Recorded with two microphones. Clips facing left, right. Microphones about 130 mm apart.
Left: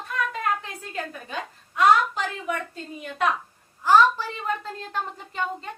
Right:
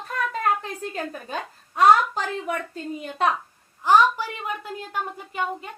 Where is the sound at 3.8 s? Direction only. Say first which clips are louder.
Even; 15° right (ahead or behind).